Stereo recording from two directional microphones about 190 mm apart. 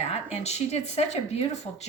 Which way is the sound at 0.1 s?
35° left (ahead or behind).